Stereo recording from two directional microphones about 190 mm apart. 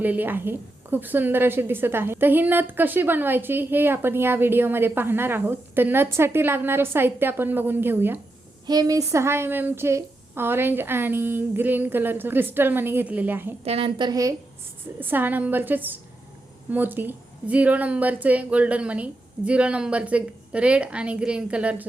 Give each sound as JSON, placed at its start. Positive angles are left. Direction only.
{"t": 0.0, "sound": "a woman's voice", "side_deg": -10}
{"t": 8.6, "sound": "a woman's voice", "side_deg": -20}
{"t": 13.7, "sound": "a woman's voice", "side_deg": -30}